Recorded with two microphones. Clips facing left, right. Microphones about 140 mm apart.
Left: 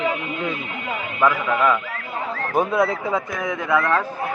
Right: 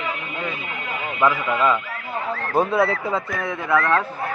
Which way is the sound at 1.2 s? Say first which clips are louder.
Left 1 dB; 5° right (ahead or behind).